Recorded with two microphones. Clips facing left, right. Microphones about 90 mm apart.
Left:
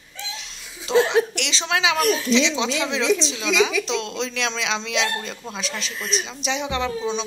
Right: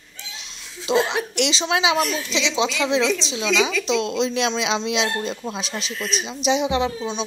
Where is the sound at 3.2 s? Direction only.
15° right (ahead or behind).